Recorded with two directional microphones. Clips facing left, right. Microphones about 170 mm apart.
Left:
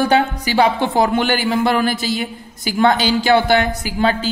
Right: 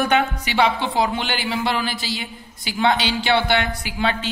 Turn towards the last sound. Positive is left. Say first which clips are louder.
# left 5 dB
turn(degrees=40)  # may be behind; listen again after turning